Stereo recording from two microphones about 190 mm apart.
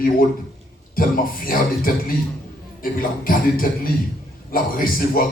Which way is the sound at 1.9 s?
50° left (ahead or behind).